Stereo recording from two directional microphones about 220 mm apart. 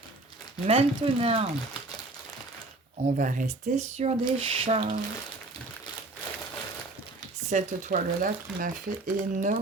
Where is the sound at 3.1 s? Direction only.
35° right (ahead or behind).